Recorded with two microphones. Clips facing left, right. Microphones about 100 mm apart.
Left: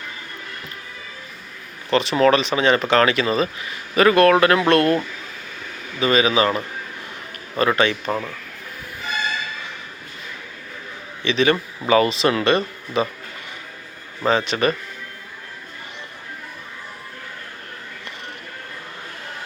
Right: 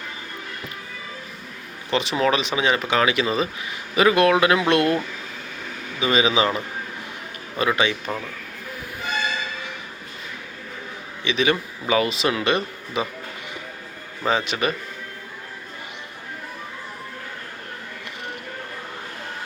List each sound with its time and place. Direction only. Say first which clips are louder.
1.9 s speech: left 5 dB; 15° right (ahead or behind)
6.0 s speech: left 2 dB; 20° right (ahead or behind)
7.6 s speech: left 3 dB; 10° right (ahead or behind)
11.2 s speech: left 3 dB; 10° right (ahead or behind)
14.3 s speech: left 3 dB; 10° right (ahead or behind)